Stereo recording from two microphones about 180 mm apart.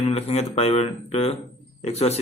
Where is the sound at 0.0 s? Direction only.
35° left (ahead or behind).